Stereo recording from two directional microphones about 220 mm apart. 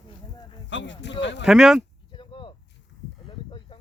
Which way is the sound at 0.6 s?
55° left (ahead or behind).